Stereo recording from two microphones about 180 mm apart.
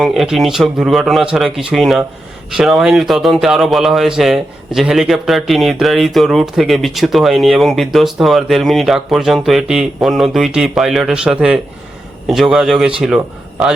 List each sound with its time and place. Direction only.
0.0 s speech: centre (ahead or behind)